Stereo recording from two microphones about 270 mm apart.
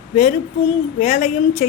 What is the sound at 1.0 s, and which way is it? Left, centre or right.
Speech, left.